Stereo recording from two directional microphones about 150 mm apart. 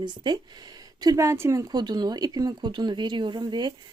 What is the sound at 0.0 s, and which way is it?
Speech, 30° right (ahead or behind).